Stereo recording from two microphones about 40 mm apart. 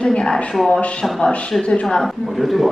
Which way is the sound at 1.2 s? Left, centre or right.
Left.